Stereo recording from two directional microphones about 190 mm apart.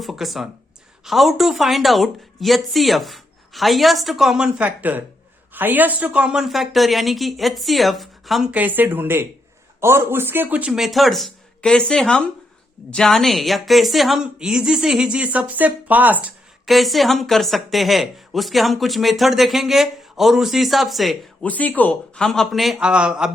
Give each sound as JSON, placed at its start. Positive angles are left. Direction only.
{"t": 0.0, "sound": "a woman's voice", "side_deg": 0}